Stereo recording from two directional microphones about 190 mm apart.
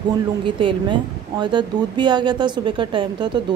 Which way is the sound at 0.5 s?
25° right (ahead or behind).